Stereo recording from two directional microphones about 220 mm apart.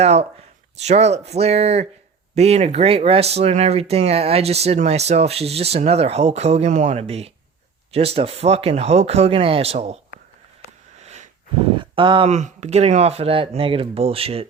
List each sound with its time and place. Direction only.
0.0 s speech: 30° right (ahead or behind)
11.0 s a sound: 30° right (ahead or behind)
11.8 s speech: 20° right (ahead or behind)